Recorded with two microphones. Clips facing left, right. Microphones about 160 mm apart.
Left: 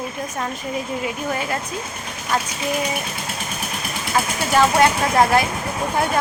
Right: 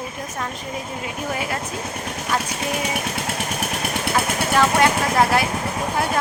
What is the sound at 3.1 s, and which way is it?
Vehicle, 75° right (ahead or behind).